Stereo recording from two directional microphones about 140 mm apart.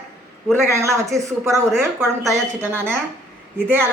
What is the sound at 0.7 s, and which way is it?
Speech, 20° right (ahead or behind).